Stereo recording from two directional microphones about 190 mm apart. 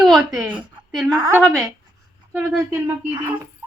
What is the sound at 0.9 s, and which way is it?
Speech, centre (ahead or behind).